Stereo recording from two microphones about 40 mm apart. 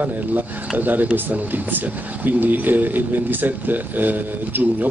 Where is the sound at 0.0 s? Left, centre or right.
Right.